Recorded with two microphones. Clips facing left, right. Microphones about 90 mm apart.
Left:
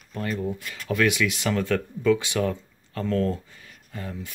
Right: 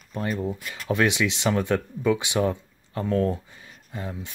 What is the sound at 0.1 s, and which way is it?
Speech, 20° right (ahead or behind).